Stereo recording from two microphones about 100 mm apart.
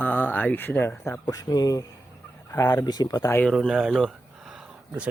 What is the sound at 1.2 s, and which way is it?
Speech, 40° left (ahead or behind).